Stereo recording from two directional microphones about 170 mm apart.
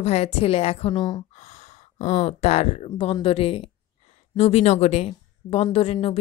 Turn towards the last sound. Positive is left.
turn(degrees=35)  # may be behind; listen again after turning